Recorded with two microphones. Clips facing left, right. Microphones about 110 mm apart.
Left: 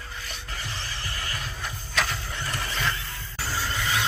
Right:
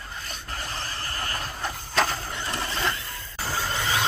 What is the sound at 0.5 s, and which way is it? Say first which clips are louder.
Horse: right 3 dB; 40° right (ahead or behind).